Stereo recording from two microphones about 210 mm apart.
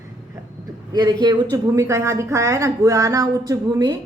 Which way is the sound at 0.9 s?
20° right (ahead or behind).